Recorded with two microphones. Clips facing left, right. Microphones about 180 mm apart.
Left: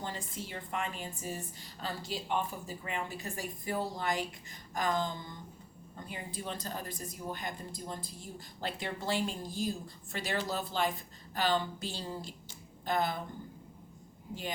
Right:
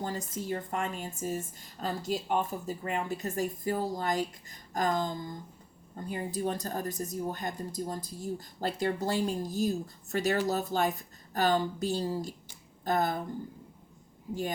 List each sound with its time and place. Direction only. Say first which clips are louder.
0.0 s speech: right 5 dB; 45° right (ahead or behind)